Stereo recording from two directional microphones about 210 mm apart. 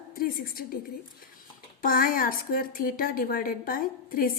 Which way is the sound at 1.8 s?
40° left (ahead or behind).